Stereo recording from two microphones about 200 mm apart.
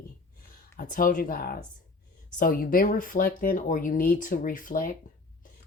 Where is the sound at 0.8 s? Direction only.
45° left (ahead or behind).